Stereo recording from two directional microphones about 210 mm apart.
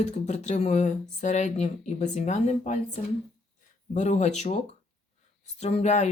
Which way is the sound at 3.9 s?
35° left (ahead or behind).